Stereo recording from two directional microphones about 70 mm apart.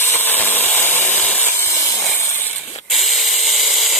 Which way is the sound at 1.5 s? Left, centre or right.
Left.